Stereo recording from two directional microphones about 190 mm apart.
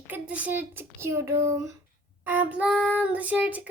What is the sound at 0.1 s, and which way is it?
Child singing, 10° right (ahead or behind).